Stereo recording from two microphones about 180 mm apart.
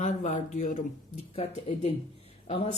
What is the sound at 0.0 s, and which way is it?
Speech, 45° left (ahead or behind).